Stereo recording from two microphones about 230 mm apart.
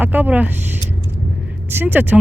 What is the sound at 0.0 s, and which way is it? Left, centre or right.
Speech, centre.